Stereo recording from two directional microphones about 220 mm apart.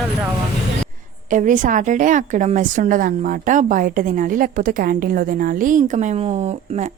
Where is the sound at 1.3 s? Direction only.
35° right (ahead or behind).